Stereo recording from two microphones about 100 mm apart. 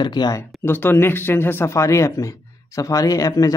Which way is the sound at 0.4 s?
20° left (ahead or behind).